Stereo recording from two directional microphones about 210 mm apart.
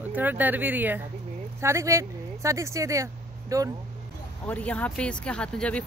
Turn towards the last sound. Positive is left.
turn(degrees=5)  # may be behind; listen again after turning